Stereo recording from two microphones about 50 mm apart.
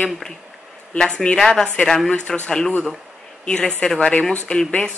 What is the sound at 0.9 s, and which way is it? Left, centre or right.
Speech, centre.